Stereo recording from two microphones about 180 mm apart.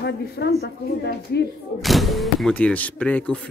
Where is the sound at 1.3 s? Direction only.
65° left (ahead or behind).